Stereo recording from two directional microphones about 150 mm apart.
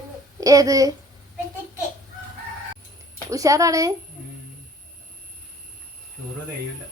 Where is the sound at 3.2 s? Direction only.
20° right (ahead or behind).